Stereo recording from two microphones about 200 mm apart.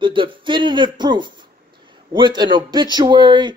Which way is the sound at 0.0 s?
25° right (ahead or behind).